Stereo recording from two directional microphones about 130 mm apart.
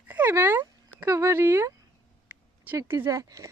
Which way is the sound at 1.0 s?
20° right (ahead or behind).